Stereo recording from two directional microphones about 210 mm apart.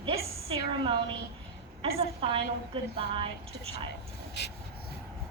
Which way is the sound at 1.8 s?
30° right (ahead or behind).